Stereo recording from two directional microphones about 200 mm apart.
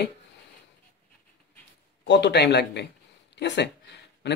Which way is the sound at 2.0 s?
60° left (ahead or behind).